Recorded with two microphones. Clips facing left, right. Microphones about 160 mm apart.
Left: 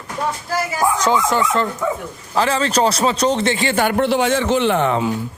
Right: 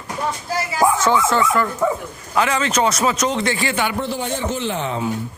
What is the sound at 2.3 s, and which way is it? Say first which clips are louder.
A man's voice: left 2 dB; 30° left (ahead or behind).